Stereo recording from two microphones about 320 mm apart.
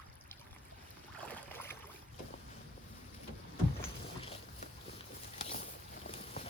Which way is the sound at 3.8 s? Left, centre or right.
Centre.